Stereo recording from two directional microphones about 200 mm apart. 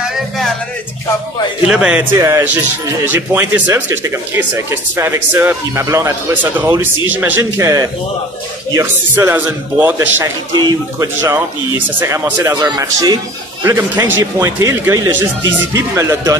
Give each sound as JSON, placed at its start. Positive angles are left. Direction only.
{"t": 1.7, "sound": "speech", "side_deg": -5}